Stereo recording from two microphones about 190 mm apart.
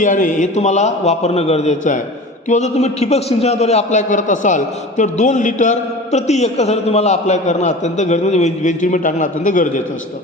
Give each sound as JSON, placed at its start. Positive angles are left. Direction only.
{"t": 0.0, "sound": "a man's voice", "side_deg": 45}